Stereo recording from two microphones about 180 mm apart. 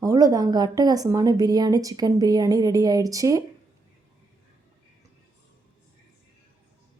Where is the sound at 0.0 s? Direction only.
20° right (ahead or behind).